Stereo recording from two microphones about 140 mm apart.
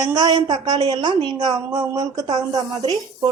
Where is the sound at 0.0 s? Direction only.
30° right (ahead or behind).